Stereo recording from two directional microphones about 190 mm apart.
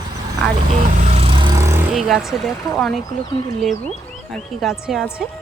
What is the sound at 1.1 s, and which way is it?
Vehicle, 30° right (ahead or behind).